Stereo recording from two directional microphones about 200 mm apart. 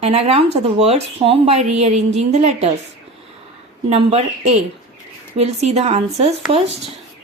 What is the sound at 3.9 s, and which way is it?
Speech, 30° right (ahead or behind).